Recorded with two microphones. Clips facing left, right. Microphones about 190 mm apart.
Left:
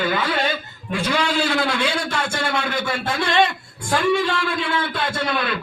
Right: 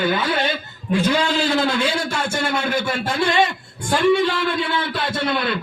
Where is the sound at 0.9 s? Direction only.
25° right (ahead or behind).